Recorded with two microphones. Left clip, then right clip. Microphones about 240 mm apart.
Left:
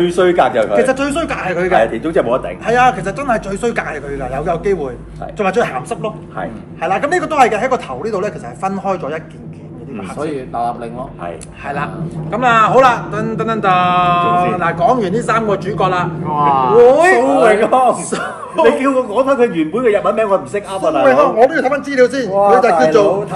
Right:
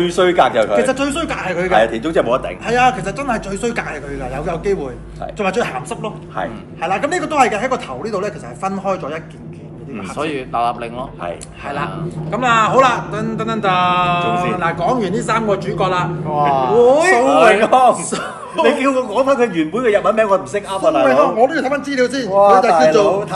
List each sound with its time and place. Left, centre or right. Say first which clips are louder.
0.0 s a man's voice: left 1 dB; centre
10.3 s speech: right 2 dB; right
11.2 s a man's voice: left 1 dB; centre